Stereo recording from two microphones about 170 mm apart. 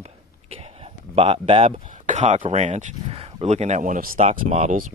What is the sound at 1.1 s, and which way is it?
Speech, 35° right (ahead or behind).